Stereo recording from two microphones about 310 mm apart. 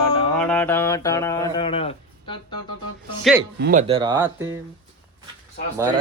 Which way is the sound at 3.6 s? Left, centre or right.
Right.